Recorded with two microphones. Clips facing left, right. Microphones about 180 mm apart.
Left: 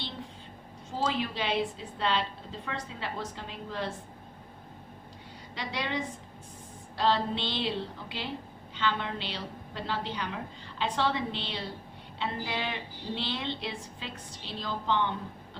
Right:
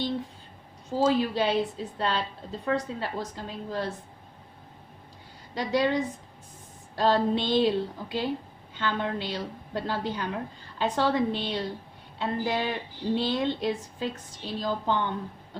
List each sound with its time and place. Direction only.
0.9 s a woman's voice: 40° right (ahead or behind)
5.5 s a woman's voice: 45° right (ahead or behind)